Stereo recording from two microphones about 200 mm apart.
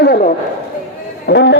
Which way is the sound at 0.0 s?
50° left (ahead or behind).